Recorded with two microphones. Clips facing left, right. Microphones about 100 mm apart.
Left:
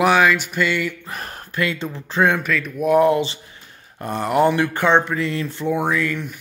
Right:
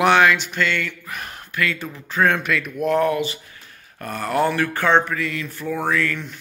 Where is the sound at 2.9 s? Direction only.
15° left (ahead or behind).